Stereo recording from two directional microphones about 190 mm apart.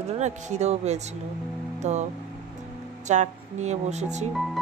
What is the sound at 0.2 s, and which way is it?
Speech, 35° right (ahead or behind).